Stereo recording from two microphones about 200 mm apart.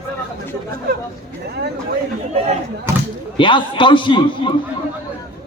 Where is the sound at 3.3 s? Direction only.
25° left (ahead or behind).